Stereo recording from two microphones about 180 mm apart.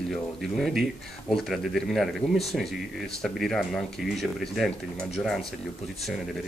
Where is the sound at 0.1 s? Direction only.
Centre (ahead or behind).